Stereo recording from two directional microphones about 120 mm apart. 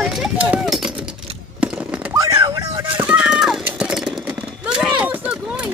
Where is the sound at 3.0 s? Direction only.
10° right (ahead or behind).